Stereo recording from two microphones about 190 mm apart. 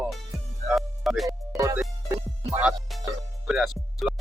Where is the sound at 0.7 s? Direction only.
Centre (ahead or behind).